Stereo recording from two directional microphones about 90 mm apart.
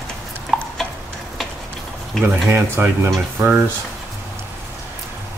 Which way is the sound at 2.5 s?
25° right (ahead or behind).